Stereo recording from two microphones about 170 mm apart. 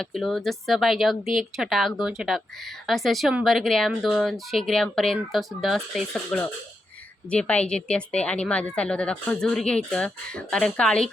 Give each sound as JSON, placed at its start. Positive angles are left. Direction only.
{"t": 0.0, "sound": "a woman's voice", "side_deg": 0}